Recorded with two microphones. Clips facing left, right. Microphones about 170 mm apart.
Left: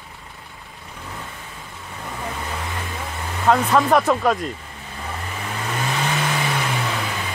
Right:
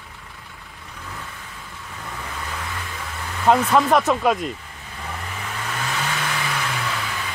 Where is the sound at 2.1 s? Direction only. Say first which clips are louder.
Left 4 dB; 20° left (ahead or behind).